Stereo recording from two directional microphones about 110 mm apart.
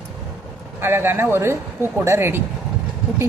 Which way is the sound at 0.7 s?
20° right (ahead or behind).